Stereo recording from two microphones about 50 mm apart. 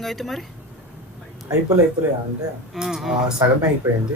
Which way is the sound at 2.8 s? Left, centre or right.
Centre.